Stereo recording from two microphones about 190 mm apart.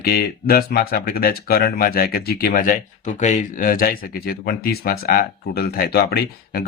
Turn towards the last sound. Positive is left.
turn(degrees=55)  # may be behind; listen again after turning